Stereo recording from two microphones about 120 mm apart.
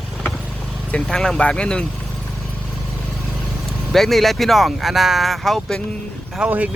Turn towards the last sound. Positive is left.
turn(degrees=-10)  # may be behind; listen again after turning